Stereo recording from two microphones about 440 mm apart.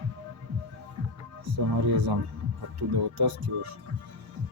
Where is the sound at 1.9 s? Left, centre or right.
Right.